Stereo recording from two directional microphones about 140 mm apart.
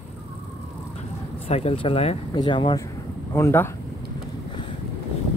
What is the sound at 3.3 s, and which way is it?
Speech, 15° left (ahead or behind).